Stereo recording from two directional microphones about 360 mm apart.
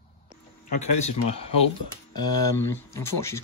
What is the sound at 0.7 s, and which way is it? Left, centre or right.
Speech, centre.